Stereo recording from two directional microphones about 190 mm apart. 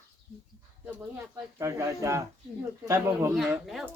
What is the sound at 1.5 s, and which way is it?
Speech, 15° right (ahead or behind).